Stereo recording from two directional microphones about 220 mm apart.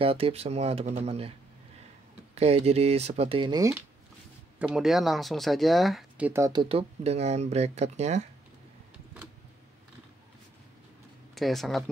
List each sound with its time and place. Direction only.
0.0 s speech: 25° right (ahead or behind)
2.3 s speech: 30° right (ahead or behind)
4.6 s speech: 5° right (ahead or behind); by 8.2 s 30° right (ahead or behind)
11.3 s speech: centre (ahead or behind)